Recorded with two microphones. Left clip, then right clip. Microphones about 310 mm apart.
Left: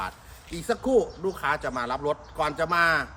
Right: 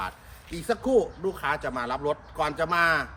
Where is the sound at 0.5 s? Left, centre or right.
Centre.